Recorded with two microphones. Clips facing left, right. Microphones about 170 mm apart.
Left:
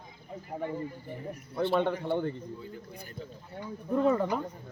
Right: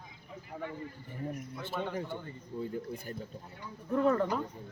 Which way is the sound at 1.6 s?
65° left (ahead or behind).